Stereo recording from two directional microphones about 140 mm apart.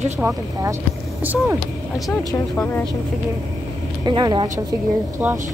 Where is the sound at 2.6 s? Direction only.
15° left (ahead or behind).